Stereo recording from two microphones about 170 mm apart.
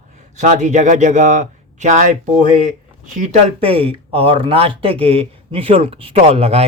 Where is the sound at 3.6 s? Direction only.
35° right (ahead or behind).